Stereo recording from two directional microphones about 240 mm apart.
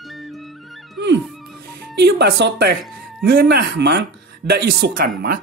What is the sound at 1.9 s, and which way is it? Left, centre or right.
Speech, right.